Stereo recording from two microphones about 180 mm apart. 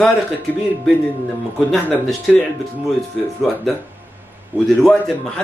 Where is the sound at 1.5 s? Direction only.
Centre (ahead or behind).